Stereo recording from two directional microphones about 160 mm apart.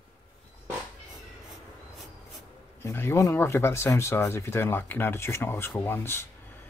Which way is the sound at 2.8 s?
15° left (ahead or behind).